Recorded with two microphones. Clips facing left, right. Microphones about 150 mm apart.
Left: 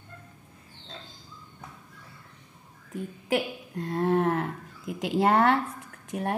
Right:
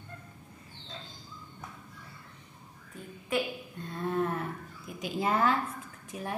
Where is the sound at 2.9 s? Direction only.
80° left.